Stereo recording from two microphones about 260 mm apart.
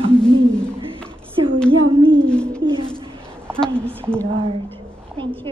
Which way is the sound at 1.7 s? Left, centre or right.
Centre.